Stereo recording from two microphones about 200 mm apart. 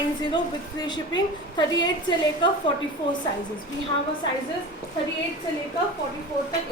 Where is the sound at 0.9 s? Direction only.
20° left (ahead or behind).